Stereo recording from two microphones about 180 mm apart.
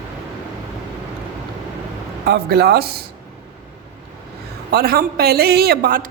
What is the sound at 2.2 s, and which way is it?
Speech, 65° right (ahead or behind).